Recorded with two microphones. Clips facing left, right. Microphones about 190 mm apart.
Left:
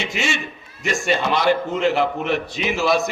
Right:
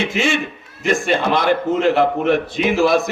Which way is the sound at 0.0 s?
55° right (ahead or behind).